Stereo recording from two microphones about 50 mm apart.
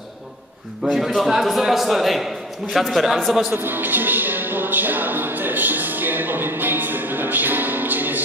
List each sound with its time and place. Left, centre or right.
0.9 s a man's voice: centre
3.5 s music: right